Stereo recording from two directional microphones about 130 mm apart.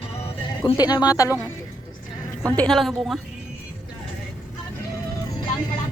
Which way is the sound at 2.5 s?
10° left (ahead or behind).